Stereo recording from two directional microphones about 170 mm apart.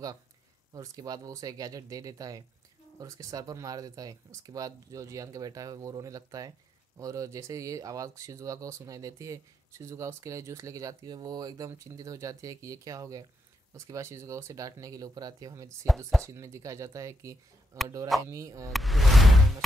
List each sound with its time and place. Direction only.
0.7 s speech: 20° right (ahead or behind)
18.7 s music: centre (ahead or behind)